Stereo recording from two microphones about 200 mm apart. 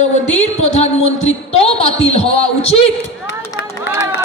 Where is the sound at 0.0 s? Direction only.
35° left (ahead or behind).